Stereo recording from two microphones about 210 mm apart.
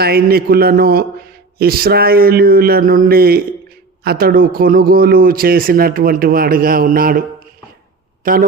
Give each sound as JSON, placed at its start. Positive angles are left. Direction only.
{"t": 0.0, "sound": "speech", "side_deg": -45}